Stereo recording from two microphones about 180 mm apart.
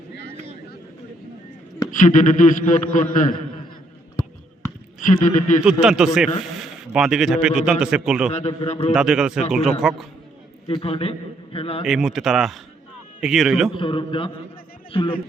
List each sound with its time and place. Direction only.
1.9 s a man's voice: 45° left (ahead or behind)
4.9 s speech: 45° left (ahead or behind)
5.6 s a man's voice: 5° right (ahead or behind)
6.6 s a sound: 5° right (ahead or behind)
7.4 s a man's voice: 5° right (ahead or behind)
8.3 s a man's voice: 40° left (ahead or behind)
8.9 s a man's voice: 5° right (ahead or behind)
10.7 s a man's voice: 30° left (ahead or behind)
11.9 s a man's voice: centre (ahead or behind)
13.7 s a man's voice: 25° left (ahead or behind)